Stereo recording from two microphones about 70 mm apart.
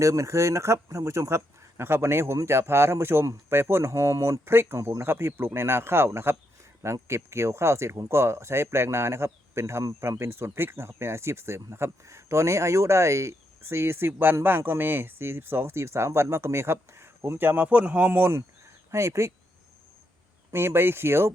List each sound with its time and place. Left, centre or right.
0.0 s speech: right
20.5 s speech: right